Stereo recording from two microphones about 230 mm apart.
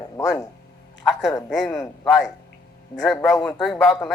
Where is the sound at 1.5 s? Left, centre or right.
Centre.